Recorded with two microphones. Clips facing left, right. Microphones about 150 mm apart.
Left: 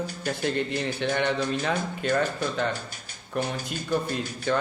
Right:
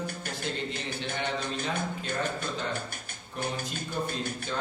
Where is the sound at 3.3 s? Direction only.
65° left (ahead or behind).